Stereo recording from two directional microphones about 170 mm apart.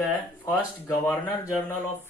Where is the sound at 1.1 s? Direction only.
10° left (ahead or behind).